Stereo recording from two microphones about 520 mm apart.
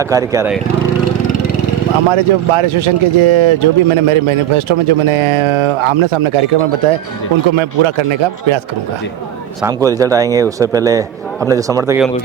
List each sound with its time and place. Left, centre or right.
0.0 s a man's voice: centre
2.0 s a man's voice: right
9.6 s a man's voice: centre